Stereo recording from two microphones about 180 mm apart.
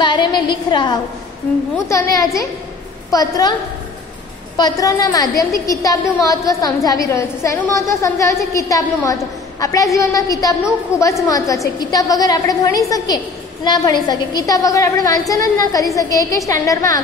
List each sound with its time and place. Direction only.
0.0 s a woman's voice: 25° left (ahead or behind)
4.6 s a woman's voice: 20° left (ahead or behind)